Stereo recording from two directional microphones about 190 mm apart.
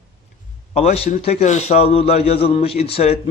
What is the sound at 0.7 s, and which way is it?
A man's voice, 35° left (ahead or behind).